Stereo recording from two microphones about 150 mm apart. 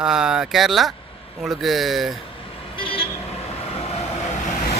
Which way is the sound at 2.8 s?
40° left (ahead or behind).